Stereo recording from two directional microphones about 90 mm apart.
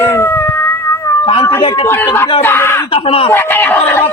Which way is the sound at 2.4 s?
25° left (ahead or behind).